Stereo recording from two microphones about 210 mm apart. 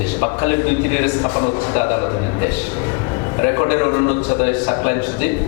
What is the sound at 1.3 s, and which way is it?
A man's voice, 25° left (ahead or behind).